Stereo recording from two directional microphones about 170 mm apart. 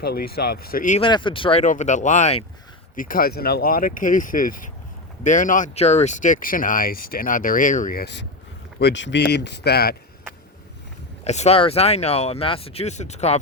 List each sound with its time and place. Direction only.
0.0 s speech: 65° left (ahead or behind)
0.9 s speech: 30° left (ahead or behind)
1.6 s speech: 45° left (ahead or behind)
2.9 s speech: 55° left (ahead or behind); by 9.9 s 70° left (ahead or behind)
11.2 s speech: 40° left (ahead or behind)